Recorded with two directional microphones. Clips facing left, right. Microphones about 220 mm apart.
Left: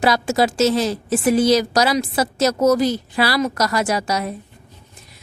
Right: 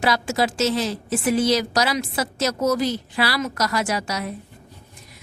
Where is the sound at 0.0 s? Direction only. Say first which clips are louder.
Left 4 dB; 40° left (ahead or behind).